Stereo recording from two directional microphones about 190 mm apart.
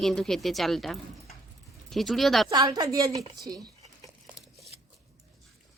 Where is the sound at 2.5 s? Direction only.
20° right (ahead or behind).